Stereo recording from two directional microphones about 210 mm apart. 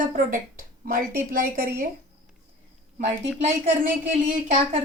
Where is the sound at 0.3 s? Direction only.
40° right (ahead or behind).